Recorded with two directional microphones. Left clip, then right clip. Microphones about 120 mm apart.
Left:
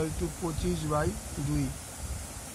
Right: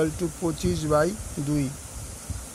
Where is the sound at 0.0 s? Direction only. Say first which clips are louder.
Right 7 dB; 80° right.